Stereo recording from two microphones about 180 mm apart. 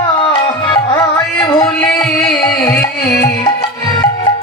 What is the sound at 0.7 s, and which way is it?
Music, 20° left (ahead or behind).